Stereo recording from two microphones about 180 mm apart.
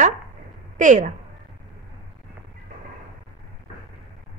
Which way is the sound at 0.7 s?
45° right (ahead or behind).